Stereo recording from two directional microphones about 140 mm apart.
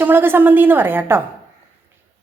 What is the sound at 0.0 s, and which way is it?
Speech, 15° right (ahead or behind).